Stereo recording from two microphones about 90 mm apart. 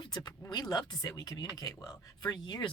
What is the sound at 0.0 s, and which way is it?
Speech, 50° left (ahead or behind).